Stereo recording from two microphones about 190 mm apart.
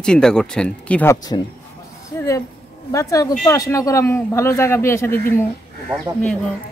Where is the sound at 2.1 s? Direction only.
15° left (ahead or behind).